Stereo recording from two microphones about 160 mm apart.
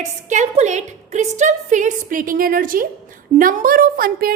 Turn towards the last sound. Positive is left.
turn(degrees=-65)  # may be behind; listen again after turning